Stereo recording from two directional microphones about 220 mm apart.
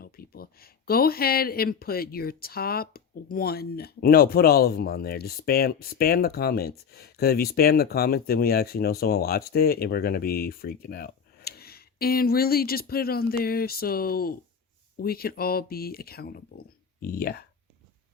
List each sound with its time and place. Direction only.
0.0 s speech: 45° left (ahead or behind)